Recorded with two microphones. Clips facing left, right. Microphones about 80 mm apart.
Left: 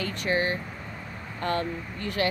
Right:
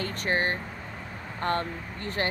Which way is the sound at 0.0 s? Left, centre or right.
Right.